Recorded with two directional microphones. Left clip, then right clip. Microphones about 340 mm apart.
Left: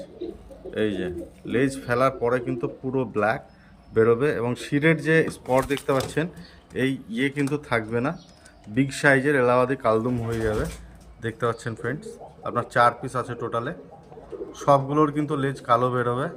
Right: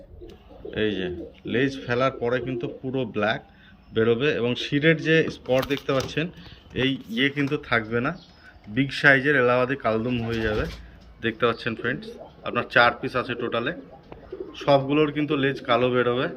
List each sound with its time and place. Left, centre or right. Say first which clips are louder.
0.7 s a man's voice: even; centre
14.6 s a man's voice: left 1 dB; centre